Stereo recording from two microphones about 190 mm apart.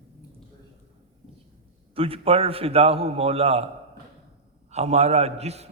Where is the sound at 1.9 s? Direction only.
30° right (ahead or behind).